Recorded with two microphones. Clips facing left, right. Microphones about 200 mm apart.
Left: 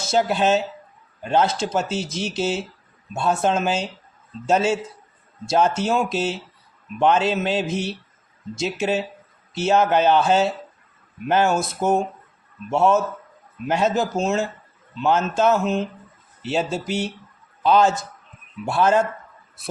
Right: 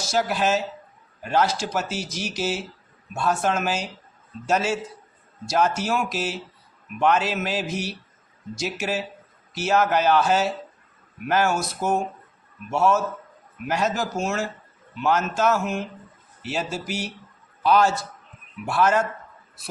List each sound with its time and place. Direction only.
0.0 s a man's voice: 25° left (ahead or behind)